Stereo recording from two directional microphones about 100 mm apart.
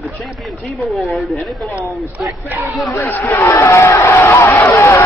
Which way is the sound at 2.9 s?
20° left (ahead or behind).